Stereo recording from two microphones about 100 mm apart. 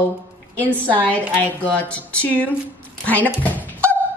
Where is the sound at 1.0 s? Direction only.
15° left (ahead or behind).